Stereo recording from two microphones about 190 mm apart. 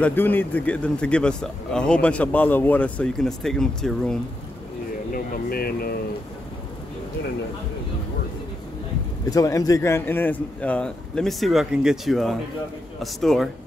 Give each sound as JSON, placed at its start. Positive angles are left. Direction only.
{"t": 0.0, "sound": "a man's voice", "side_deg": 10}
{"t": 5.1, "sound": "speech", "side_deg": 50}
{"t": 9.3, "sound": "a man's voice", "side_deg": 20}